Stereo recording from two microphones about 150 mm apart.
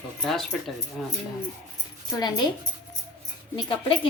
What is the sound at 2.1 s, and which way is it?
Speech, 30° left (ahead or behind).